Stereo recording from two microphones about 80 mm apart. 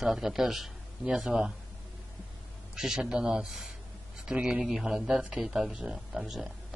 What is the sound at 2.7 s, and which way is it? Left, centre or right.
Speech, centre.